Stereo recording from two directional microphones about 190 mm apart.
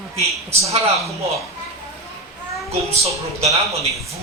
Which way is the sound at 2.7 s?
35° right (ahead or behind).